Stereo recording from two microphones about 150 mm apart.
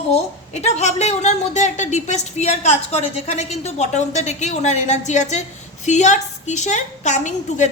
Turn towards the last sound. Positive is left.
turn(degrees=55)  # may be behind; listen again after turning